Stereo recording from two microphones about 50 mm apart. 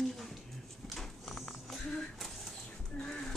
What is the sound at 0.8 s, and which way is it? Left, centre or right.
Horse, centre.